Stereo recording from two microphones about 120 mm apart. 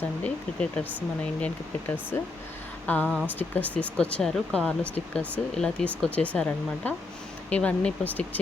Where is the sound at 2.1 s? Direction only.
15° left (ahead or behind).